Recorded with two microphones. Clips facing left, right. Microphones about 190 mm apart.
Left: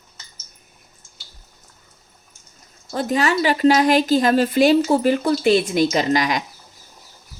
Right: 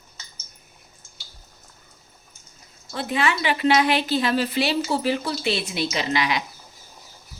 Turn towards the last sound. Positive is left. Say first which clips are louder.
# left 5 dB
turn(degrees=45)  # may be behind; listen again after turning